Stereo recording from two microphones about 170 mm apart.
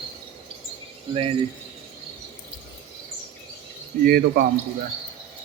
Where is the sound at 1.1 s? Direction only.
35° right (ahead or behind).